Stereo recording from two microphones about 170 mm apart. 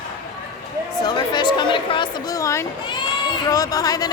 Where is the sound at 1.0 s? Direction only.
25° left (ahead or behind).